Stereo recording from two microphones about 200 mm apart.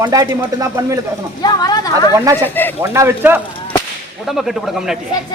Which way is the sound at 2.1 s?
15° right (ahead or behind).